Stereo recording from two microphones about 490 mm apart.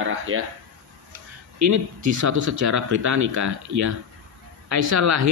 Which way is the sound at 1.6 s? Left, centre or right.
Right.